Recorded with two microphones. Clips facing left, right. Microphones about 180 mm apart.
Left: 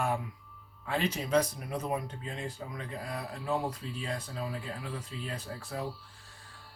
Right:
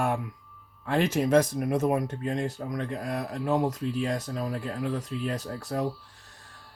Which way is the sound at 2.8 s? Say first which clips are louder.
Right 7 dB; 45° right (ahead or behind).